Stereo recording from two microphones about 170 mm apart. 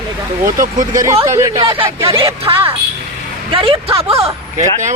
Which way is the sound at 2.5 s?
20° right (ahead or behind).